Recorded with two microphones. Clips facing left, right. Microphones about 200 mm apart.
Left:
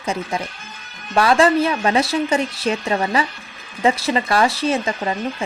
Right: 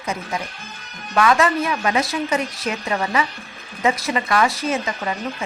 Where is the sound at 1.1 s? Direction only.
30° left (ahead or behind).